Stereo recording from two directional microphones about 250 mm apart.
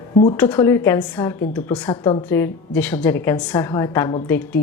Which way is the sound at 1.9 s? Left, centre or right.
Left.